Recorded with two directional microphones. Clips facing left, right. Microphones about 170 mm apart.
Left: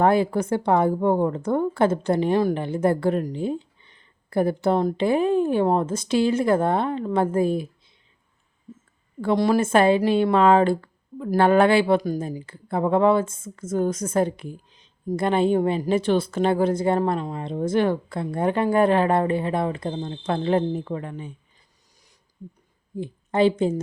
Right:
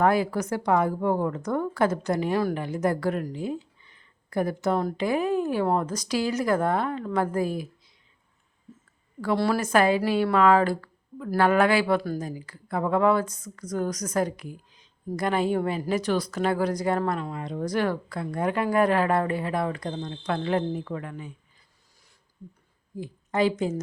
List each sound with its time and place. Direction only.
0.0 s a woman's voice: 25° left (ahead or behind)
9.2 s a woman's voice: 20° left (ahead or behind)
23.0 s a woman's voice: 25° left (ahead or behind)